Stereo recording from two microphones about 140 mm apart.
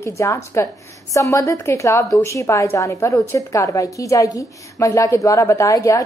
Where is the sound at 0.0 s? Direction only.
20° left (ahead or behind).